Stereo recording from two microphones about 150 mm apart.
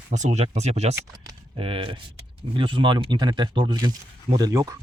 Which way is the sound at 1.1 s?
25° right (ahead or behind).